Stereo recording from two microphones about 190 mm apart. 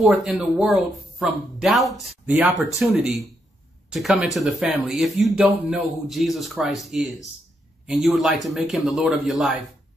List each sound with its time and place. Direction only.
0.0 s speech: centre (ahead or behind)